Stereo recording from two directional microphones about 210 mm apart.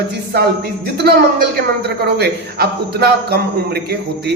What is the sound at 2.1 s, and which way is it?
Speech, 50° right (ahead or behind).